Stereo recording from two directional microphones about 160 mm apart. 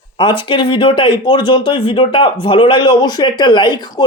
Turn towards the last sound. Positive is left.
turn(degrees=25)  # may be behind; listen again after turning